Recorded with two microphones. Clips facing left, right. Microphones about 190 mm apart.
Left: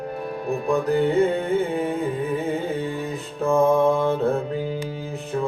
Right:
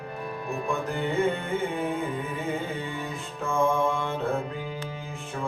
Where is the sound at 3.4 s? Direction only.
40° left (ahead or behind).